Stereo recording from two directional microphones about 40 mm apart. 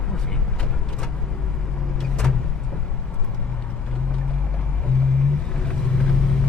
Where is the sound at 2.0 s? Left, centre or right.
Centre.